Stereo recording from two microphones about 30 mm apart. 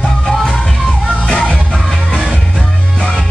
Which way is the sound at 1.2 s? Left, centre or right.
Left.